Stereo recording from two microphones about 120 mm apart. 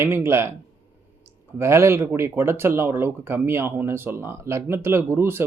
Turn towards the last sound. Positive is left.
turn(degrees=-20)  # may be behind; listen again after turning